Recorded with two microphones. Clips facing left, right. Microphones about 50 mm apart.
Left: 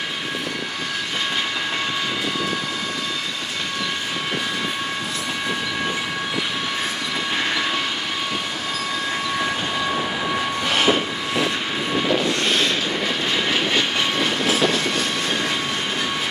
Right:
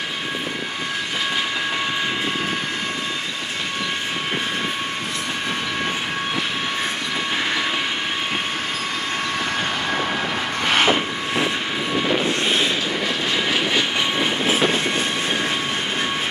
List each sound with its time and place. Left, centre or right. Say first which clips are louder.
12.1 s vehicle: even; centre
13.5 s vehicle: even; centre
14.1 s vehicle: even; centre